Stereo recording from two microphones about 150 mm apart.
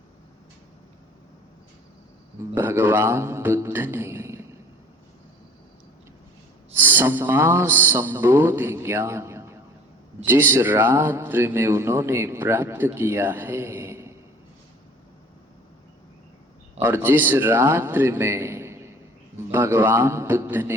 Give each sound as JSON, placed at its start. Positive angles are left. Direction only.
{"t": 2.6, "sound": "mantra", "side_deg": -15}
{"t": 6.7, "sound": "speech", "side_deg": -15}
{"t": 16.8, "sound": "speech", "side_deg": -15}